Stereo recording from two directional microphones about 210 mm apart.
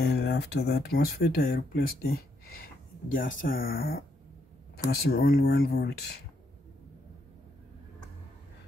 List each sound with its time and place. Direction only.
0.0 s speech: 50° left (ahead or behind)
5.0 s speech: 45° left (ahead or behind)